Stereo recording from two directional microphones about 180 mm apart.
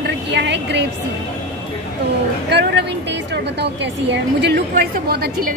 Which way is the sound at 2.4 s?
70° right (ahead or behind).